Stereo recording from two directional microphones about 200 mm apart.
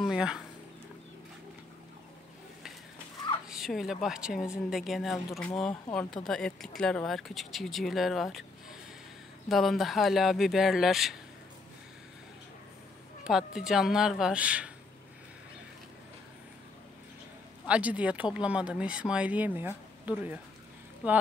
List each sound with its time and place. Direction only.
0.0 s a sound: 5° right (ahead or behind)
3.4 s speech: centre (ahead or behind)
9.5 s speech: centre (ahead or behind)
13.2 s speech: 5° right (ahead or behind)
17.6 s speech: 5° right (ahead or behind)